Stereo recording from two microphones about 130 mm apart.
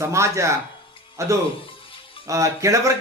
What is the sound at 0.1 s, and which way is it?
Speech, 20° right (ahead or behind).